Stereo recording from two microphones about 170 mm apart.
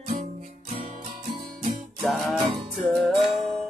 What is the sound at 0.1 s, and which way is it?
Music, 45° right (ahead or behind).